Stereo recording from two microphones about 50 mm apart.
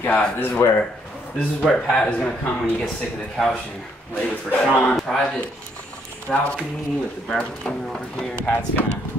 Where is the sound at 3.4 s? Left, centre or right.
Centre.